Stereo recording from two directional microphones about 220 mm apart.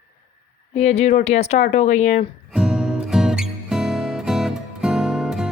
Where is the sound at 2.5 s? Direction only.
5° right (ahead or behind).